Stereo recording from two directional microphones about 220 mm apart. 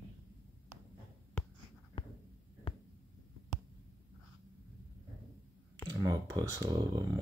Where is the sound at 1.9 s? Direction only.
25° left (ahead or behind).